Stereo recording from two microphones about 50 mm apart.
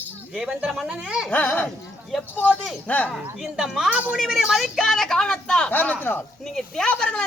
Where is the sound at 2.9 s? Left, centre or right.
Left.